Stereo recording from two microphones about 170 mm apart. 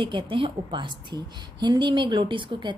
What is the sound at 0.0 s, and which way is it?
A woman's voice, 25° right (ahead or behind).